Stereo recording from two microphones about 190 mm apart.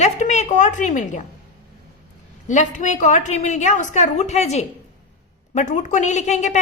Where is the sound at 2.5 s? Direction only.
40° left (ahead or behind).